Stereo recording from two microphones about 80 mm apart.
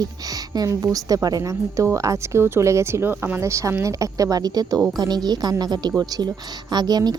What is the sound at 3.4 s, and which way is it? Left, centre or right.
Speech, right.